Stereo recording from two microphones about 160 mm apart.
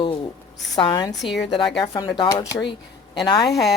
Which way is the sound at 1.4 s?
30° left (ahead or behind).